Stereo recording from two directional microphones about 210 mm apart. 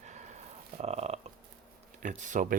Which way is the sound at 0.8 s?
30° right (ahead or behind).